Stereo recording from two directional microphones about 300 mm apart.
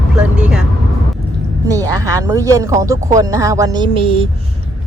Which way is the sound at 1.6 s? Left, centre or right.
Centre.